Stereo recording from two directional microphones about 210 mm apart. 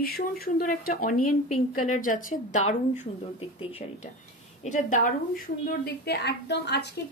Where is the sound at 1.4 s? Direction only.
90° left.